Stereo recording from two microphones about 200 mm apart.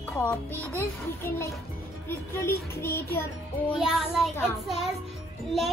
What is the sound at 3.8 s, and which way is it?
Speech, centre (ahead or behind).